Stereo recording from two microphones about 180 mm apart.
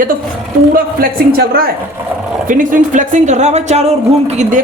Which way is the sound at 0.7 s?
55° right (ahead or behind).